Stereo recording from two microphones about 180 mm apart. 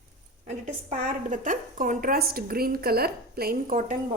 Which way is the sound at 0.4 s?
40° right (ahead or behind).